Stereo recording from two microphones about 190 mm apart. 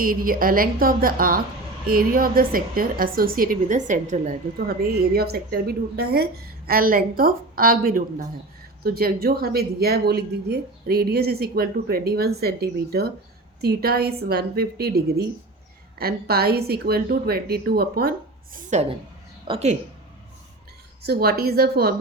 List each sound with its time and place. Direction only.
0.0 s a woman's voice: 50° right (ahead or behind)
4.5 s a woman's voice: 55° right (ahead or behind)
18.5 s a woman's voice: 35° right (ahead or behind)
21.0 s a woman's voice: 55° right (ahead or behind)